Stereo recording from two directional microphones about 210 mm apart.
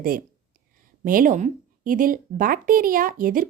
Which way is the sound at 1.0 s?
40° right (ahead or behind).